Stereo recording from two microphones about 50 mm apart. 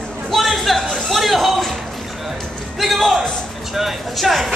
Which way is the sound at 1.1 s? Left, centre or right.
Centre.